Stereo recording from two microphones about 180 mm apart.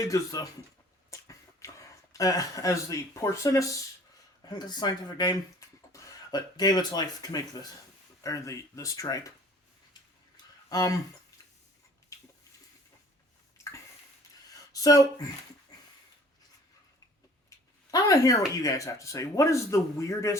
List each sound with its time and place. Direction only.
0.1 s speech: 20° left (ahead or behind)
10.7 s speech: 20° left (ahead or behind)
14.5 s a sound: 20° left (ahead or behind)
17.9 s speech: 20° left (ahead or behind)